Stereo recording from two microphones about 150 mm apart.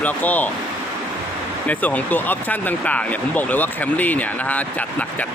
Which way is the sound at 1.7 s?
10° left (ahead or behind).